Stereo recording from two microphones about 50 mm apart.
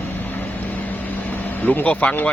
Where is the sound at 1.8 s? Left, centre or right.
Left.